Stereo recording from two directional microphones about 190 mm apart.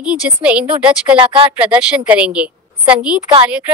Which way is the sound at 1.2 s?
25° right (ahead or behind).